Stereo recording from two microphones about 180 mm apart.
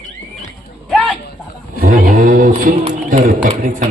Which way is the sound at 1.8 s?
50° right (ahead or behind).